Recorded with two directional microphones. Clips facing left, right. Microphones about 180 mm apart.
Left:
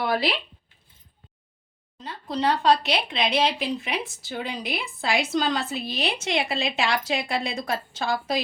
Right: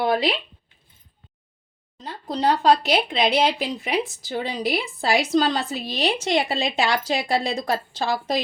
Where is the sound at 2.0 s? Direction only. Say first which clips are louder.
Right 3 dB; 40° right (ahead or behind).